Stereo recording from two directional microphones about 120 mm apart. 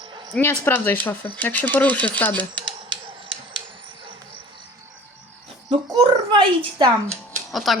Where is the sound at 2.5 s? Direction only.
45° right (ahead or behind).